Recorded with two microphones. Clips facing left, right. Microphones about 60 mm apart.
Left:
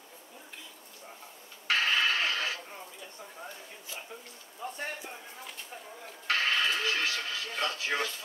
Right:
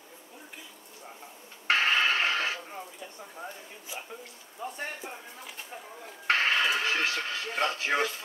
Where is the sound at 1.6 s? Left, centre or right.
Right.